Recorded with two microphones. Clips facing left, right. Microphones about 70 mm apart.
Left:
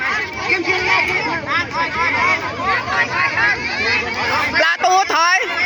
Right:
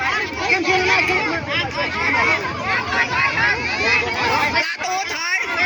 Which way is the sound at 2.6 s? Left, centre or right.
Left.